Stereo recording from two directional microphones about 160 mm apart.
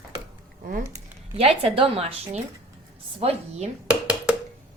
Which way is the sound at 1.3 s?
40° right (ahead or behind).